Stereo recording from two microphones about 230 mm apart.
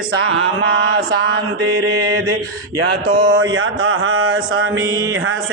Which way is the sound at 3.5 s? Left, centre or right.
Right.